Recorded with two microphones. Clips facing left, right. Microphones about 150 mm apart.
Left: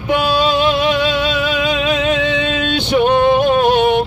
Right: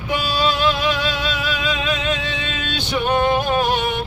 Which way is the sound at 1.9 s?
70° left (ahead or behind).